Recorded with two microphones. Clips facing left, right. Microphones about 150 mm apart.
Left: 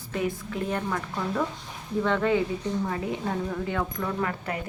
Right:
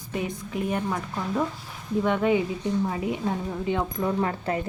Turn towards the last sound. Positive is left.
turn(degrees=-30)  # may be behind; listen again after turning